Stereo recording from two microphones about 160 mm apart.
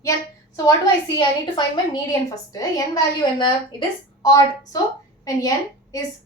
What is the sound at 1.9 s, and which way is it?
Speech, 20° left (ahead or behind).